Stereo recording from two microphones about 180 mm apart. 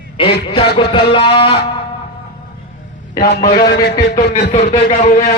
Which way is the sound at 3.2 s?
55° left (ahead or behind).